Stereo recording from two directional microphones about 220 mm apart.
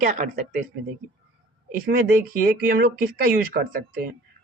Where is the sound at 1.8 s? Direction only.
40° right (ahead or behind).